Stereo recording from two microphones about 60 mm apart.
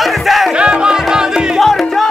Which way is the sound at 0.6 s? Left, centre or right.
Centre.